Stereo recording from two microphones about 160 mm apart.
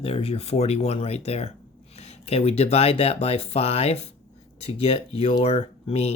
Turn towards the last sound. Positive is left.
turn(degrees=40)  # may be behind; listen again after turning